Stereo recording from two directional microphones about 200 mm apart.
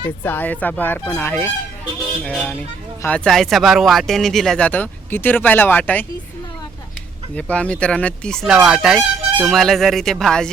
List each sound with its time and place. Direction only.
0.2 s speech: 10° left (ahead or behind)
7.3 s speech: 5° left (ahead or behind)